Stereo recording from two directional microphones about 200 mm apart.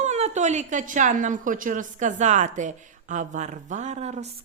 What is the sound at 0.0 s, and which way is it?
A woman's voice, 35° right (ahead or behind).